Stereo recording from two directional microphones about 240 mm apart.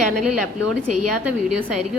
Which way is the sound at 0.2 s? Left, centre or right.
Centre.